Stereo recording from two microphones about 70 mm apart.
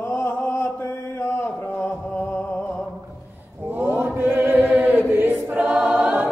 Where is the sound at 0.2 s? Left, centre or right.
Left.